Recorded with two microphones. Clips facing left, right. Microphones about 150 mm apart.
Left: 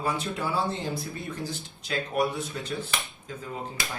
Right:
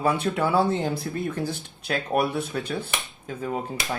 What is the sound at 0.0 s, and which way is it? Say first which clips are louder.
Speech: right 6 dB; 60° right (ahead or behind).